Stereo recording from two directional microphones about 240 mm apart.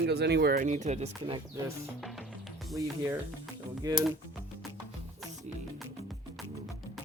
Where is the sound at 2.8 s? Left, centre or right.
Centre.